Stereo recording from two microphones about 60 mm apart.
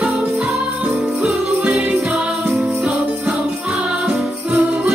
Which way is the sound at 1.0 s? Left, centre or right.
Centre.